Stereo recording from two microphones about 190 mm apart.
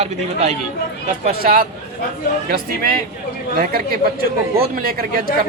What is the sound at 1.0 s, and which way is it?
Speech, 50° right (ahead or behind).